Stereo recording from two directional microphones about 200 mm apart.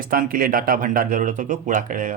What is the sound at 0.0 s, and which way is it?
Speech, 45° right (ahead or behind).